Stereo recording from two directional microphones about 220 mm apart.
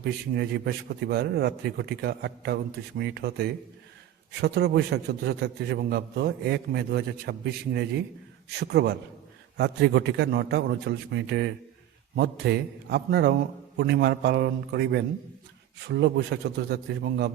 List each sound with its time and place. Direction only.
0.0 s a man's voice: 50° right (ahead or behind)